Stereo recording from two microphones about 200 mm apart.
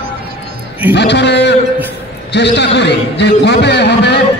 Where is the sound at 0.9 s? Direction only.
60° left (ahead or behind).